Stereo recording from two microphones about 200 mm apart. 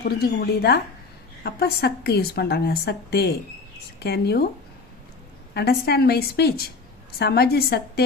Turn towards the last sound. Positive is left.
turn(degrees=50)  # may be behind; listen again after turning